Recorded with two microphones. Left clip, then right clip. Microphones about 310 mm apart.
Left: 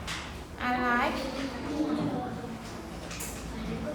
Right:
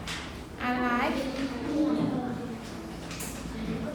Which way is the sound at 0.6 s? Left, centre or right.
Left.